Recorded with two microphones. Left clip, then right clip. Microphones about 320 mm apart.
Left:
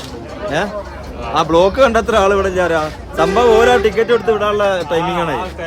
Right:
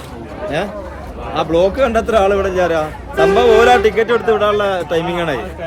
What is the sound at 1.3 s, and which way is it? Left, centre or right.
A man's voice, centre.